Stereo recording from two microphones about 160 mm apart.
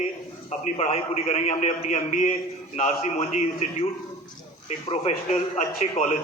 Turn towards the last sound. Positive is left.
turn(degrees=45)  # may be behind; listen again after turning